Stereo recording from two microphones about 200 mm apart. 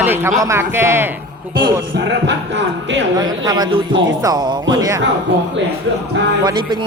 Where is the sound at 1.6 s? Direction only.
65° right (ahead or behind).